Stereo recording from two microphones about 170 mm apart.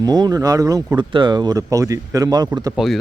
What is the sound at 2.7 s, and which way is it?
Speech, centre (ahead or behind).